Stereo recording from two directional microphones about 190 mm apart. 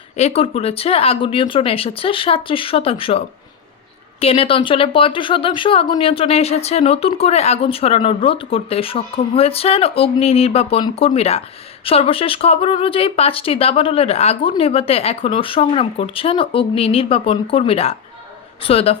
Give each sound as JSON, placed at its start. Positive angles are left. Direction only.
{"t": 0.2, "sound": "speech", "side_deg": 35}